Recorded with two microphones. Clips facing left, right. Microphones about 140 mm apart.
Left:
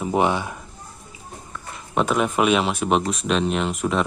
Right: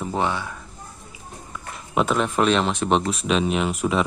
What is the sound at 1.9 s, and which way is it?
Speech, 5° left (ahead or behind).